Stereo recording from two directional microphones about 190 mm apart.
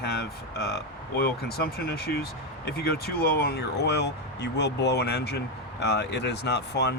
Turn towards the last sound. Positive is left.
turn(degrees=60)  # may be behind; listen again after turning